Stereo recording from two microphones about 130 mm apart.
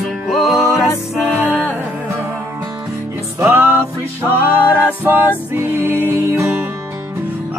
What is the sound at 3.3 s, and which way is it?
Music, 15° right (ahead or behind).